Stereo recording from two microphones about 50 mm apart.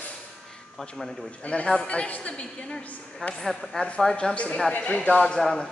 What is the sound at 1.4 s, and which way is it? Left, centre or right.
A woman's voice, left.